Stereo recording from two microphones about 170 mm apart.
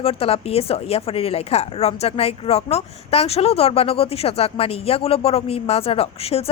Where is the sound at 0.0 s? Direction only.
35° left (ahead or behind).